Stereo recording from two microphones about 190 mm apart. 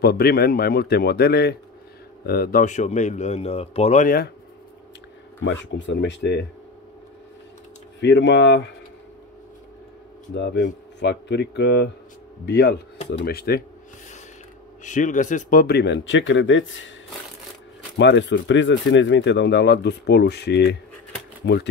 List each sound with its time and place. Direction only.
0.0 s speech: 55° left (ahead or behind)
5.4 s speech: 75° left (ahead or behind)
8.0 s speech: 70° left (ahead or behind)
10.3 s speech: 65° left (ahead or behind)
14.8 s speech: 40° left (ahead or behind); by 16.9 s 80° left
17.9 s speech: 65° left (ahead or behind)